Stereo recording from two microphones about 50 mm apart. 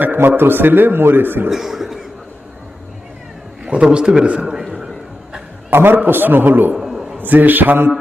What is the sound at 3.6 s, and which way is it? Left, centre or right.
A man's voice, right.